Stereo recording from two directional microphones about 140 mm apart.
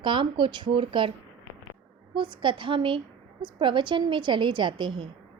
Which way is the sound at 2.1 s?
35° right (ahead or behind).